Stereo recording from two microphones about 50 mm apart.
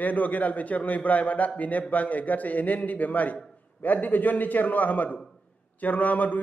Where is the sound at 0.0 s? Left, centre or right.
Left.